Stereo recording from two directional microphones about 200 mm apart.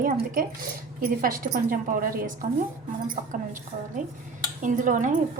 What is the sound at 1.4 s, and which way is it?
A woman's voice, 45° right (ahead or behind).